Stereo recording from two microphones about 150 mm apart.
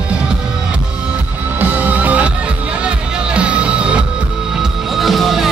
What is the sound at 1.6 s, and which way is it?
Music, 10° right (ahead or behind).